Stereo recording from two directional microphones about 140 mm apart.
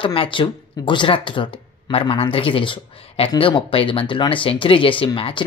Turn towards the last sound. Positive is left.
turn(degrees=35)  # may be behind; listen again after turning